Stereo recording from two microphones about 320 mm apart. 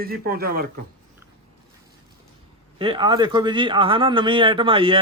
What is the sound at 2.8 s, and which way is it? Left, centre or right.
Speech, centre.